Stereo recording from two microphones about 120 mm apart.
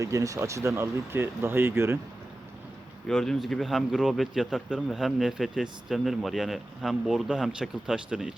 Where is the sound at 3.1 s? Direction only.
5° left (ahead or behind).